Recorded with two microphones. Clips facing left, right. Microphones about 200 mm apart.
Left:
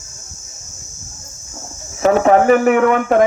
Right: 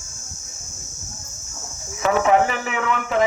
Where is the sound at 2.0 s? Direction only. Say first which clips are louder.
Left 6 dB; 40° left (ahead or behind).